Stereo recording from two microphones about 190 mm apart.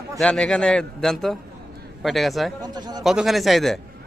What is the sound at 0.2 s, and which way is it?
A man's voice, 5° left (ahead or behind).